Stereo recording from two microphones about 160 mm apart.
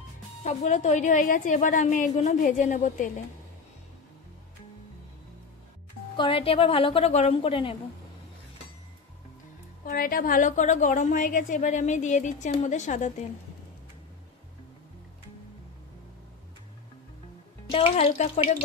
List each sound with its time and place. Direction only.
0.4 s a woman's voice: 45° left (ahead or behind)
6.1 s a woman's voice: 30° left (ahead or behind)
9.8 s a woman's voice: 65° left (ahead or behind); by 13.1 s 50° left (ahead or behind)
17.6 s a woman's voice: 35° left (ahead or behind)